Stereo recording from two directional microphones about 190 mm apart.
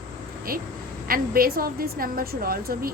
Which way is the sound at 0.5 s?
50° right (ahead or behind).